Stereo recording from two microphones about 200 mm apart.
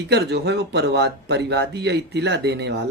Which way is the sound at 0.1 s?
55° right (ahead or behind).